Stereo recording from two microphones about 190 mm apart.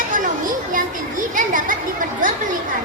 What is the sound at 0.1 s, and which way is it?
Children playing, 45° right (ahead or behind).